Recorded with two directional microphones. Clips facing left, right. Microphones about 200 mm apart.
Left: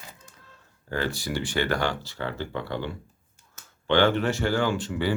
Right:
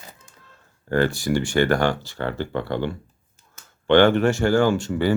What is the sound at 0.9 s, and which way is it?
Speech, 55° right (ahead or behind).